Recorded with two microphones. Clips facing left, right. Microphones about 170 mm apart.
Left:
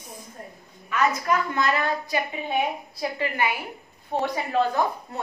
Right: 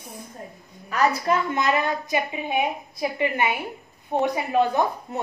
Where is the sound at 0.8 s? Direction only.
35° right (ahead or behind).